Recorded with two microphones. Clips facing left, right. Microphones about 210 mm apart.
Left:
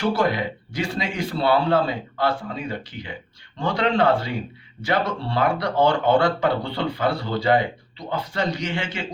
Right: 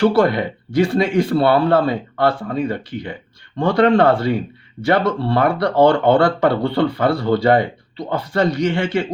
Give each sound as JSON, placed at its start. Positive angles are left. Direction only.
{"t": 0.0, "sound": "speech", "side_deg": -60}